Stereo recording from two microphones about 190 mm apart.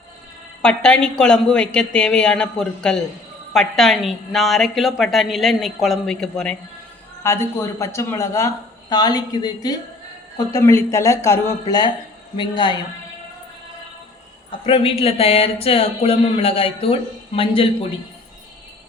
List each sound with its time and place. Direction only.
0.6 s a woman's voice: 5° left (ahead or behind)
7.2 s speech: 15° left (ahead or behind)
14.7 s speech: 30° left (ahead or behind)